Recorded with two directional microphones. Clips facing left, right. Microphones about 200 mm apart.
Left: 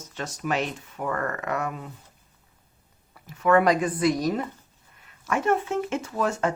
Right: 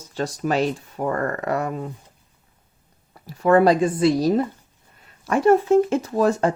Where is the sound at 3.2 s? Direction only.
35° right (ahead or behind).